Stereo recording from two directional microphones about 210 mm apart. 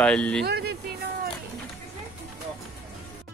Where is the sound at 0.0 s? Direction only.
5° left (ahead or behind).